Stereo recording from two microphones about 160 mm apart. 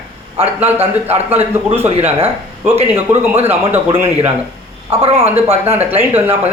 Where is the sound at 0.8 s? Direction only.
40° right (ahead or behind).